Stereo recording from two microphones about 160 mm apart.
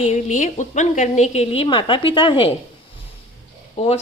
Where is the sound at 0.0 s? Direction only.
45° left (ahead or behind); by 2.5 s 30° left (ahead or behind).